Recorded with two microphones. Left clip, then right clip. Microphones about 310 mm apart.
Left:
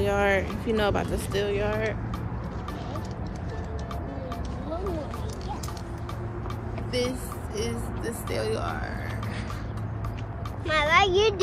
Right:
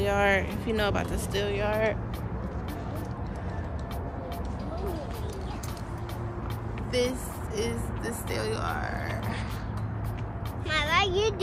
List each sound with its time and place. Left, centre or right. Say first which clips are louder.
0.0 s speech: left 1 dB; centre
6.9 s a sound: right 1 dB; centre
8.3 s speech: left 2 dB; centre
10.7 s speech: left 4 dB; centre